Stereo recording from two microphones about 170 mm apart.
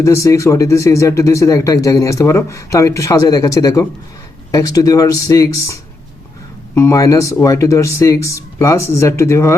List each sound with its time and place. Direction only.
0.0 s speech: 15° left (ahead or behind)